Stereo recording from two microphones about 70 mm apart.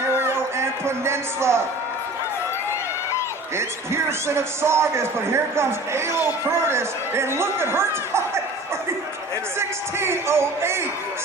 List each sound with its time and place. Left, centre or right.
0.2 s music: right
3.6 s a man's voice: right
9.6 s a man's voice: right